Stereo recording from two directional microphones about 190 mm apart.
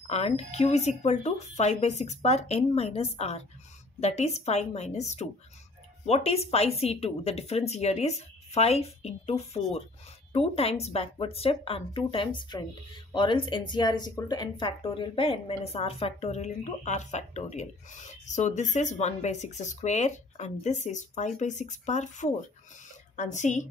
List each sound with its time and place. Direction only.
0.1 s speech: 35° left (ahead or behind)